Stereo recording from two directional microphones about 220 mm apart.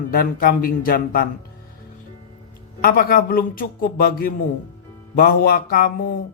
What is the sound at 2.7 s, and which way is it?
A man's voice, 40° left (ahead or behind).